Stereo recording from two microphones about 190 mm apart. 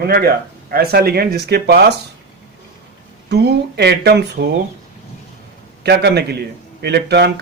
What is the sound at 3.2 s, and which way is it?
Speech, 60° right (ahead or behind).